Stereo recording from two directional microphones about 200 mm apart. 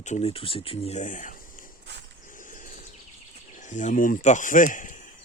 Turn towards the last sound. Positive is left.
turn(degrees=40)  # may be behind; listen again after turning